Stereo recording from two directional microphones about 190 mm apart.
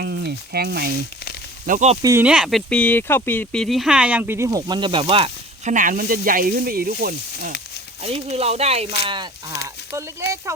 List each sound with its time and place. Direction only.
0.0 s speech: 60° right (ahead or behind)
1.6 s speech: 40° right (ahead or behind)
2.0 s speech: 15° right (ahead or behind)
2.2 s speech: 5° right (ahead or behind); by 5.7 s 30° right (ahead or behind)
5.7 s speech: 45° right (ahead or behind)
8.0 s speech: 30° right (ahead or behind)
9.9 s speech: 15° right (ahead or behind)